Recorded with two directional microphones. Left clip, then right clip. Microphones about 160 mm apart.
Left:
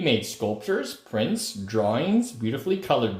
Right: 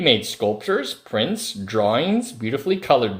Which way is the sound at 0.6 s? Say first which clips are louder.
Right 5 dB; 25° right (ahead or behind).